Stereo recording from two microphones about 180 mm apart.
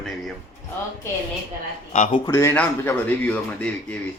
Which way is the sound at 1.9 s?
45° left (ahead or behind).